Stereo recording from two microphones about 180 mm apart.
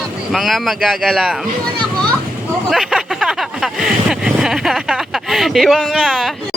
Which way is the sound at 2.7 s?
Centre (ahead or behind).